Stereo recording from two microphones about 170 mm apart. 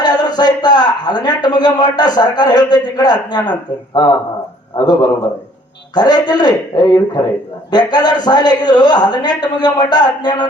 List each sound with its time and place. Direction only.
0.0 s a man's voice: 25° left (ahead or behind)
5.9 s speech: 25° left (ahead or behind)